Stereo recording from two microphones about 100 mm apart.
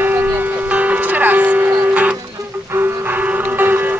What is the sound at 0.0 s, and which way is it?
Music, 20° right (ahead or behind).